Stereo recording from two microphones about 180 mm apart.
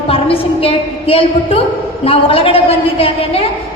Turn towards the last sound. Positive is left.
turn(degrees=30)  # may be behind; listen again after turning